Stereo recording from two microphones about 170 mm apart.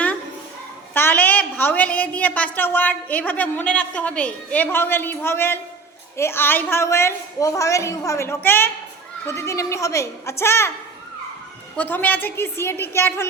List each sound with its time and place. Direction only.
0.9 s a woman's voice: 10° left (ahead or behind)
11.8 s a woman's voice: 10° left (ahead or behind)